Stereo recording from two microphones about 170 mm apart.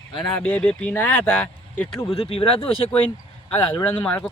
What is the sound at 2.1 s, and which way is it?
Speech, 35° left (ahead or behind).